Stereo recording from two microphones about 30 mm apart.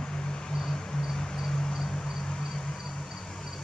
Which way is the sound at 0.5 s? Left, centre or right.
Centre.